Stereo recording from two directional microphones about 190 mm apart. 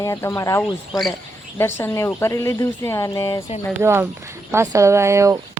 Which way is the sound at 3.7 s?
10° right (ahead or behind).